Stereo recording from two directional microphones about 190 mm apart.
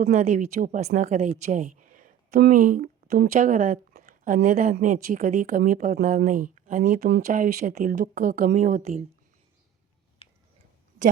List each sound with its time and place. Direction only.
0.0 s a woman's voice: 40° right (ahead or behind)